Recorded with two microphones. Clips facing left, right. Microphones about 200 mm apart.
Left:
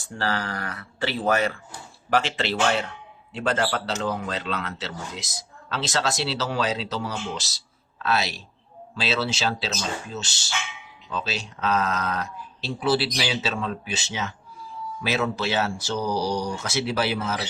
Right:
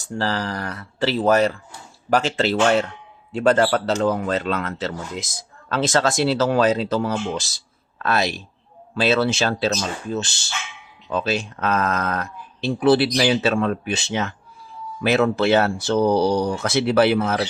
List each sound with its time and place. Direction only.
0.0 s speech: 40° right (ahead or behind); by 17.4 s 60° right (ahead or behind)